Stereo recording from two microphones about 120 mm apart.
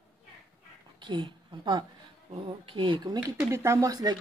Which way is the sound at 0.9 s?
40° right (ahead or behind).